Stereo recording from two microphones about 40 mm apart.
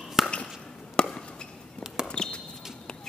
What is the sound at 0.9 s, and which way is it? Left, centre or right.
Chop, left.